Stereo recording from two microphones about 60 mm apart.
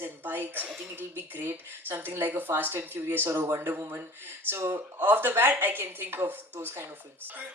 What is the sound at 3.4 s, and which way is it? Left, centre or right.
A woman's voice, right.